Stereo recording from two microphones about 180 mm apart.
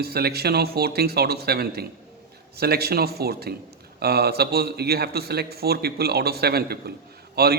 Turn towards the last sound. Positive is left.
turn(degrees=-60)  # may be behind; listen again after turning